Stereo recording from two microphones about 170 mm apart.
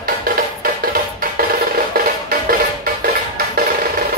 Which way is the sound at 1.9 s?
60° right (ahead or behind).